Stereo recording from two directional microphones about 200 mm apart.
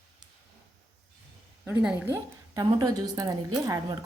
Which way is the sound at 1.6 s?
5° right (ahead or behind).